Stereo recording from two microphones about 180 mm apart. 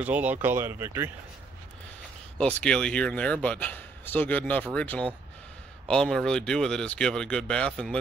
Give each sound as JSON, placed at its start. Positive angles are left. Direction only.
{"t": 0.0, "sound": "speech", "side_deg": -10}
{"t": 2.3, "sound": "a man's voice", "side_deg": 5}